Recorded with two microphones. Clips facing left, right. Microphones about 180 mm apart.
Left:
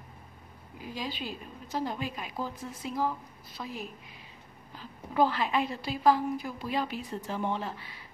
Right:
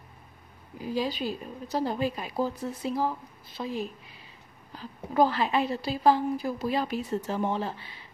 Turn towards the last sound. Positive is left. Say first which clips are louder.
# right 3 dB
turn(degrees=-30)  # may be behind; listen again after turning